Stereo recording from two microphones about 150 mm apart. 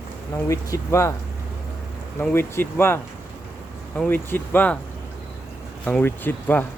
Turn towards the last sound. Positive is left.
turn(degrees=15)  # may be behind; listen again after turning